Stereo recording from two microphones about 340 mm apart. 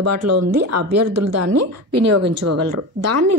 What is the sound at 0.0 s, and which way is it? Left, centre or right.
A woman's voice, right.